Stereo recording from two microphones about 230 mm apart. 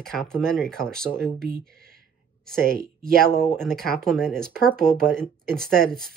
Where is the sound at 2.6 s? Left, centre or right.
Right.